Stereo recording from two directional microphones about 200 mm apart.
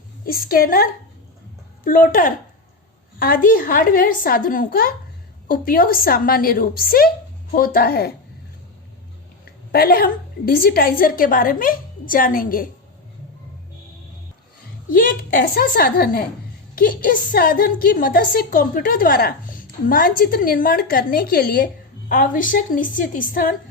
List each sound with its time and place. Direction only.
0.3 s a woman's voice: 45° left (ahead or behind)
9.7 s a woman's voice: 50° left (ahead or behind)
14.9 s a woman's voice: 45° left (ahead or behind)